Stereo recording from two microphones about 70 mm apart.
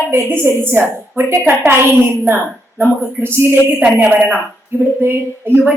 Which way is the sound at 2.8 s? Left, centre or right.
Right.